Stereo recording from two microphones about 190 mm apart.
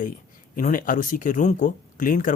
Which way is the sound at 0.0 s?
45° left (ahead or behind).